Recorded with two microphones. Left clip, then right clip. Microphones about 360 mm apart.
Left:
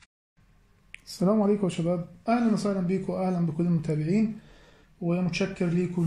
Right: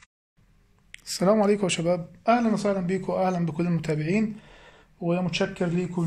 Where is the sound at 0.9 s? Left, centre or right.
Right.